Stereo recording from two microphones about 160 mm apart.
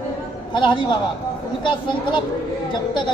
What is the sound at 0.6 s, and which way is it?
A man's voice, 30° left (ahead or behind).